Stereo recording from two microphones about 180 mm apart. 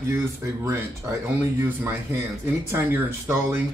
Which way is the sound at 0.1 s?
15° right (ahead or behind).